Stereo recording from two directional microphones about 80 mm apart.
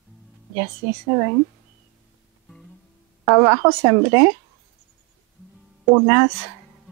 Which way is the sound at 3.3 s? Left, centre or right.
Right.